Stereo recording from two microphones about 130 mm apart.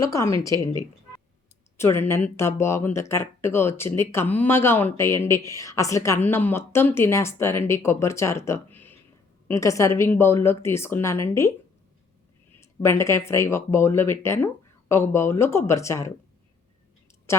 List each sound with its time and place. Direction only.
0.0 s speech: 25° left (ahead or behind)
1.8 s speech: 20° left (ahead or behind)
12.5 s speech: 20° left (ahead or behind)
17.3 s speech: 20° left (ahead or behind)